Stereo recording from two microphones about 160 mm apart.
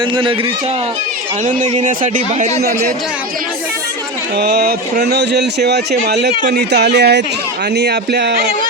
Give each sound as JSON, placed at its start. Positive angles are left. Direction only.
{"t": 0.0, "sound": "a man's voice", "side_deg": -30}
{"t": 1.5, "sound": "a man's voice", "side_deg": -50}
{"t": 4.4, "sound": "a man's voice", "side_deg": -85}